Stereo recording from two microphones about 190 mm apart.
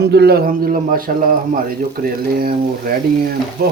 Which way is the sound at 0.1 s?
60° right (ahead or behind).